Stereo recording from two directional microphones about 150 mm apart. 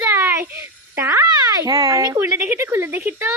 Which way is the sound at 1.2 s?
25° right (ahead or behind).